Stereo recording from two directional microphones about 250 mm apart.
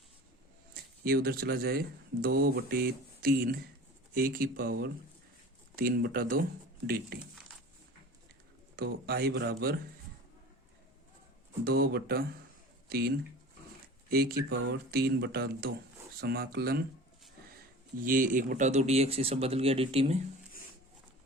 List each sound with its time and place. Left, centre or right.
0.7 s speech: right
8.7 s speech: right
11.6 s speech: right
18.0 s speech: right